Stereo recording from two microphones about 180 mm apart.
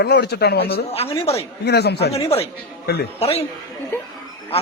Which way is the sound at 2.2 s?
35° left (ahead or behind).